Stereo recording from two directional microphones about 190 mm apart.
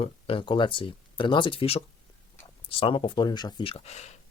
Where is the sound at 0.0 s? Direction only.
30° left (ahead or behind).